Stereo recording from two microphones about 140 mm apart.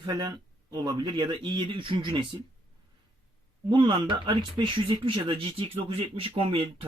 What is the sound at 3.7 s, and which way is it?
Speech, 35° right (ahead or behind).